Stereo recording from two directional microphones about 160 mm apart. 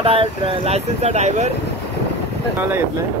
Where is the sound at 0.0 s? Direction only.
35° right (ahead or behind).